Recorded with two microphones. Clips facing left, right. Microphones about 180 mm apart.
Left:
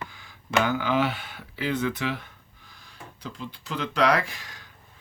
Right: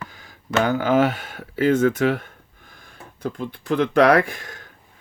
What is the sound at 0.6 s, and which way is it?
Speech, 45° right (ahead or behind).